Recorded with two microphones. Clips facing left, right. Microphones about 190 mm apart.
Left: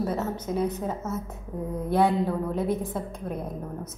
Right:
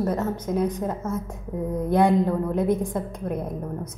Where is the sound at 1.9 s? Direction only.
15° right (ahead or behind).